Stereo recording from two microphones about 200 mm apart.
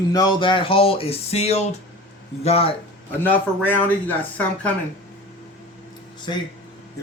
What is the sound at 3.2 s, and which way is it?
Speech, 10° left (ahead or behind).